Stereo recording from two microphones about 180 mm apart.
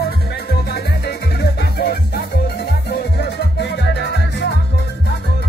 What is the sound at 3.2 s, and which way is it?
Music, 70° left (ahead or behind).